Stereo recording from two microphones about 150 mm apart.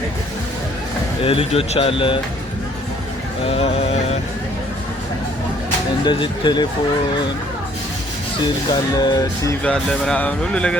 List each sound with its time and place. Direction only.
1.2 s speech: 40° left (ahead or behind)
3.4 s speech: 40° left (ahead or behind)
6.1 s speech: 30° left (ahead or behind)
8.7 s speech: 30° left (ahead or behind)
9.6 s speech: 5° left (ahead or behind)